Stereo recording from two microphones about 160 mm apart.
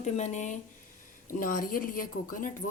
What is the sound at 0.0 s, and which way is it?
Speech, 50° left (ahead or behind).